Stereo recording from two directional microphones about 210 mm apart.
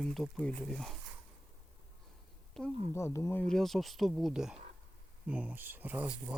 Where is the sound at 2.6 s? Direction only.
Centre (ahead or behind).